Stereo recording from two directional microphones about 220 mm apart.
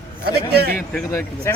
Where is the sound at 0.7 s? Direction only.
10° left (ahead or behind).